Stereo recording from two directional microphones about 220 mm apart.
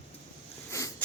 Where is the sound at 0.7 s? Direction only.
15° left (ahead or behind).